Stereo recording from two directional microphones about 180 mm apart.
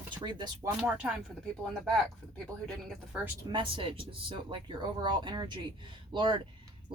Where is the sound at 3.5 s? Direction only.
30° right (ahead or behind).